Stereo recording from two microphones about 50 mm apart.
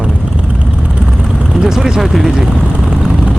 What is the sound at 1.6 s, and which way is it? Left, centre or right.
Speech, centre.